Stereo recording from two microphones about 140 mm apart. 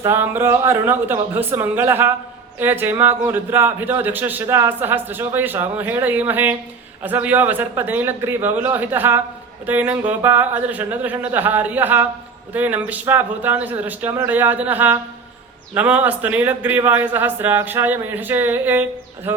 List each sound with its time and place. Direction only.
0.0 s a man's voice: 15° right (ahead or behind)